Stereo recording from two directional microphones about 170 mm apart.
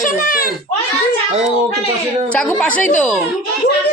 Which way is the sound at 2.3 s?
5° left (ahead or behind).